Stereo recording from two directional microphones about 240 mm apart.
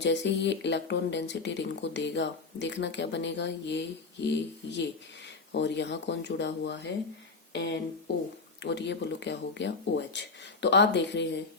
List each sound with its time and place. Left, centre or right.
0.0 s speech: left